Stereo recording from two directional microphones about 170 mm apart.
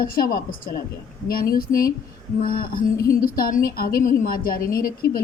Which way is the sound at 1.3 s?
60° left (ahead or behind).